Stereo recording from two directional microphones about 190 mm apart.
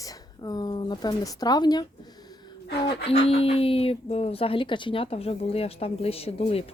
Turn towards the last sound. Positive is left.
turn(degrees=30)  # may be behind; listen again after turning